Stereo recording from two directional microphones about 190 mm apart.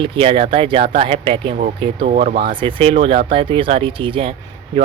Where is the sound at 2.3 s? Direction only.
50° right (ahead or behind).